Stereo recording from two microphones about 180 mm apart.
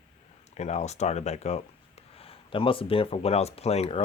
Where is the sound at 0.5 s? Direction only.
40° left (ahead or behind).